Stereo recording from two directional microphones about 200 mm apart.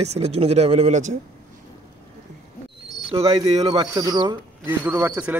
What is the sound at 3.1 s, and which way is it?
Speech, 30° right (ahead or behind).